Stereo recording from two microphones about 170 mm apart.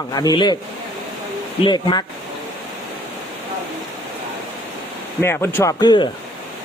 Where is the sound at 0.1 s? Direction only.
25° left (ahead or behind).